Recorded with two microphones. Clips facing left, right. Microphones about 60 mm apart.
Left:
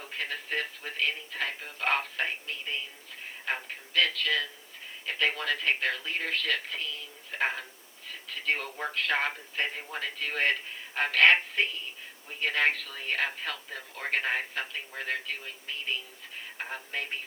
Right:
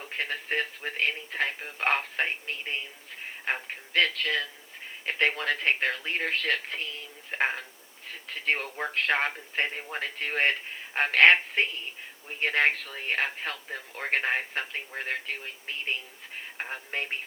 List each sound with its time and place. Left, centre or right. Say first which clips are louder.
0.2 s speech: right 3 dB; right